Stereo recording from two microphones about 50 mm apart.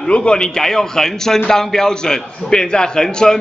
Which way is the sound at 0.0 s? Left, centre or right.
Centre.